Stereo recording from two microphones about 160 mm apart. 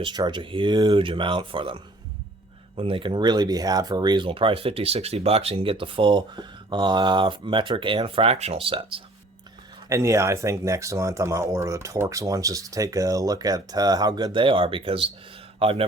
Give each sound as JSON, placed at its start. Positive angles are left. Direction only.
{"t": 0.0, "sound": "speech", "side_deg": -25}
{"t": 9.9, "sound": "speech", "side_deg": -20}